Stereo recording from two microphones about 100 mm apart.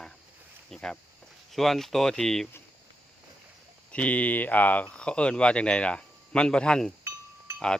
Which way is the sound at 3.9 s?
15° left (ahead or behind).